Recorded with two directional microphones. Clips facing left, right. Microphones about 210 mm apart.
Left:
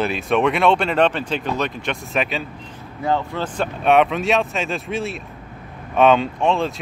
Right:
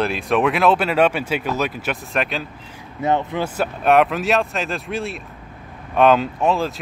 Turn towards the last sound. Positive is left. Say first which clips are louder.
# even
turn(degrees=-5)  # may be behind; listen again after turning